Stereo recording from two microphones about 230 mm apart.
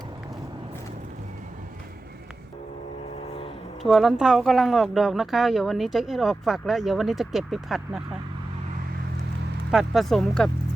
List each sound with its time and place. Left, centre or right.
3.8 s speech: centre
9.7 s speech: centre